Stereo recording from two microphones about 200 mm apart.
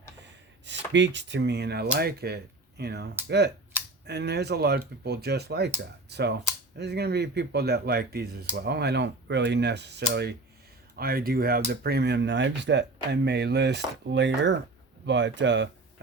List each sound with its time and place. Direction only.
0.6 s speech: 65° right (ahead or behind)